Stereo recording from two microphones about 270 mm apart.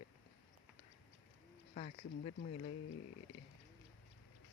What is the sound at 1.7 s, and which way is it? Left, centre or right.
Speech, left.